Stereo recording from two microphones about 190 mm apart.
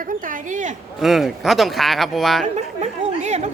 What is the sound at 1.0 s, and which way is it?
Speech, centre (ahead or behind).